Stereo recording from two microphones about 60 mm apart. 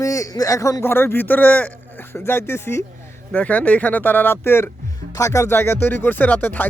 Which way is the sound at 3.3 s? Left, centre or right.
Left.